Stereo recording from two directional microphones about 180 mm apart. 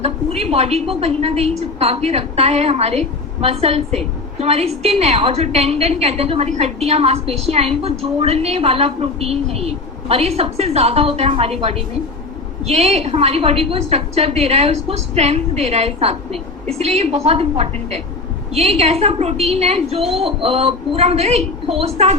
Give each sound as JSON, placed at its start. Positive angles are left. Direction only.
{"t": 0.0, "sound": "a woman's voice", "side_deg": -35}